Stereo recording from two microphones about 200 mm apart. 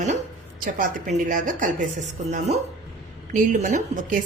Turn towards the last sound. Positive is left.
turn(degrees=-40)  # may be behind; listen again after turning